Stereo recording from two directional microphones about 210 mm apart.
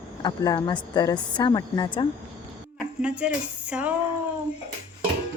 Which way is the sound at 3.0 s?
5° right (ahead or behind).